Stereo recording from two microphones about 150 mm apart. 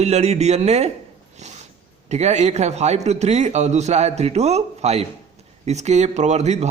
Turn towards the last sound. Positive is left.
turn(degrees=-50)  # may be behind; listen again after turning